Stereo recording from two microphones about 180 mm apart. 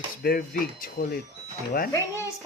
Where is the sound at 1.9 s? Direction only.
15° left (ahead or behind).